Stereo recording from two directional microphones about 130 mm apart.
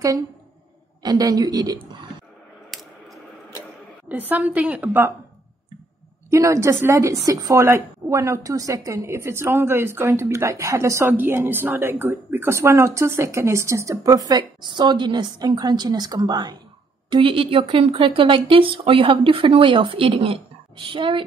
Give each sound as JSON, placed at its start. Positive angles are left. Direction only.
{"t": 1.0, "sound": "a woman's voice", "side_deg": -30}
{"t": 2.7, "sound": "coin", "side_deg": 0}
{"t": 4.1, "sound": "a woman's voice", "side_deg": -15}
{"t": 6.3, "sound": "a woman's voice", "side_deg": -25}
{"t": 17.1, "sound": "speech", "side_deg": -45}